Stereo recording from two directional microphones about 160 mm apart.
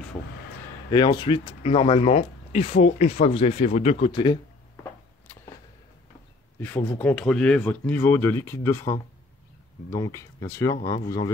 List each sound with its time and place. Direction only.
0.9 s speech: 30° left (ahead or behind)
4.1 s speech: 30° left (ahead or behind)
6.6 s speech: 10° left (ahead or behind)